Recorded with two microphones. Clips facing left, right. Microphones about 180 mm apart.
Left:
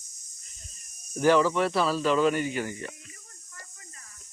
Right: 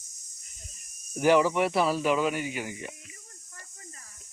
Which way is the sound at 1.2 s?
15° right (ahead or behind).